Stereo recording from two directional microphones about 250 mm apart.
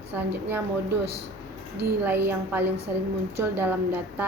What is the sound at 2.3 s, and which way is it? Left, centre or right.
A woman's voice, centre.